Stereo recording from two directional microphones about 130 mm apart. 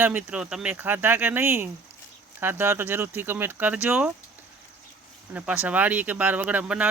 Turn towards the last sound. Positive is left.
turn(degrees=-10)  # may be behind; listen again after turning